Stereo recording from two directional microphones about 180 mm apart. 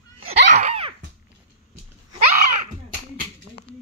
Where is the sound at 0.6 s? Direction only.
35° right (ahead or behind).